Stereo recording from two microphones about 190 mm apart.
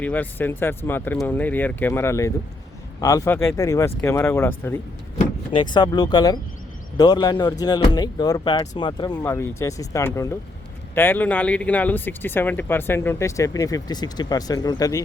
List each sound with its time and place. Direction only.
0.0 s speech: 10° left (ahead or behind)
5.1 s speech: 25° left (ahead or behind)